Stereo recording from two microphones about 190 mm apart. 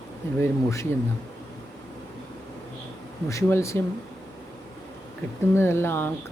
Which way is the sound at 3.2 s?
15° left (ahead or behind).